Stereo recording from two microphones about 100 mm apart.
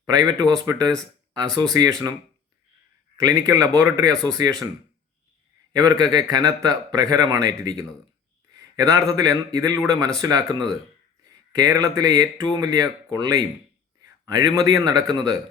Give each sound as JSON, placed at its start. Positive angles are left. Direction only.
{"t": 0.0, "sound": "a man's voice", "side_deg": -40}
{"t": 3.2, "sound": "a man's voice", "side_deg": -35}
{"t": 5.7, "sound": "a man's voice", "side_deg": -40}